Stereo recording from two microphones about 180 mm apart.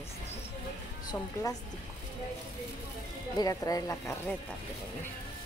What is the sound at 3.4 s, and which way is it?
Speech, 20° left (ahead or behind).